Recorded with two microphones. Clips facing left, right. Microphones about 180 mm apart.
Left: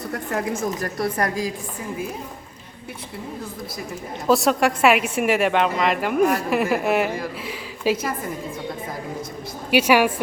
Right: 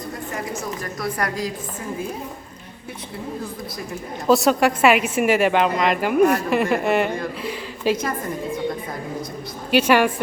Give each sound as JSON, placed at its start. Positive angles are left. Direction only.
{"t": 0.8, "sound": "speech", "side_deg": 30}
{"t": 4.3, "sound": "a woman's voice", "side_deg": 0}
{"t": 9.6, "sound": "a woman's voice", "side_deg": 10}